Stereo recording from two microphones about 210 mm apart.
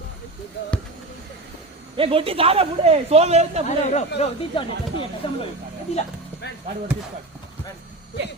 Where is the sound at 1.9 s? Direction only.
25° right (ahead or behind).